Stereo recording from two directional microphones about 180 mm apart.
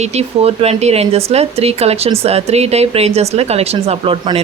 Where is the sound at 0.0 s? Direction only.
35° right (ahead or behind).